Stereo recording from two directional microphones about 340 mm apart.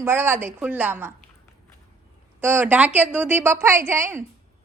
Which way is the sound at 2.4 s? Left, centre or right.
Centre.